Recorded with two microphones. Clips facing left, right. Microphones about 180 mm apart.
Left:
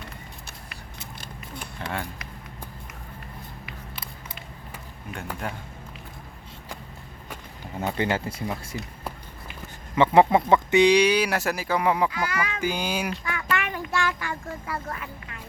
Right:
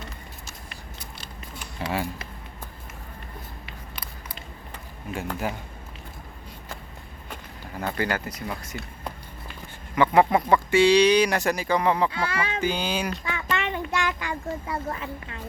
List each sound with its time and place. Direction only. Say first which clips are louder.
1.2 s a sound: left 4 dB; 50° left (ahead or behind)
5.4 s a man's voice: right 3 dB; 5° right (ahead or behind)
7.7 s speech: left 2 dB; 25° left (ahead or behind)
12.1 s speech: right 1 dB; 30° right (ahead or behind)
12.6 s speech: even; 10° left (ahead or behind)
13.2 s a sound: even; 25° right (ahead or behind)